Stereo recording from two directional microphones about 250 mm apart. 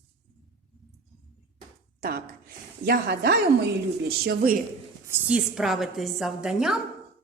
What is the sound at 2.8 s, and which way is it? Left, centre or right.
A woman's voice, right.